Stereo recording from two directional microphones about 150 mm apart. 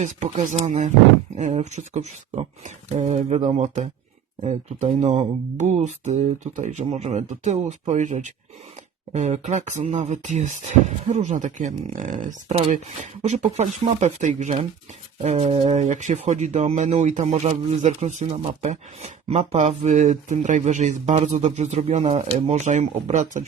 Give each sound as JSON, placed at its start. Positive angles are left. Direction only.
{"t": 0.0, "sound": "speech", "side_deg": -50}